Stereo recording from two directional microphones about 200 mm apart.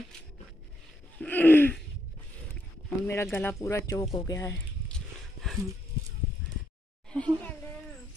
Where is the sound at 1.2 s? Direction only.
10° left (ahead or behind).